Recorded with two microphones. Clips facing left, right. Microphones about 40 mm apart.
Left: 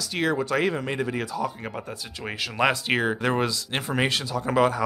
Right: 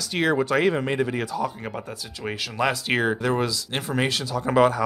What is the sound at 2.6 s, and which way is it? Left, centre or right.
Speech, left.